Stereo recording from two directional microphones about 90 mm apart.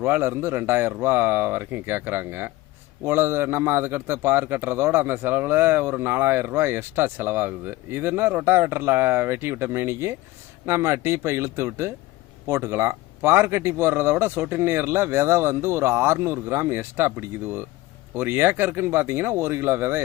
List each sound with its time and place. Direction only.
0.0 s a man's voice: 25° right (ahead or behind)